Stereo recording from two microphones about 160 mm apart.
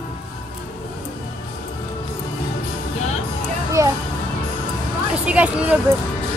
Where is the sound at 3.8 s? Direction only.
20° right (ahead or behind).